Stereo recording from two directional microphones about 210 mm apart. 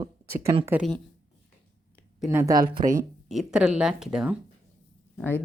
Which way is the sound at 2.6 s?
40° right (ahead or behind).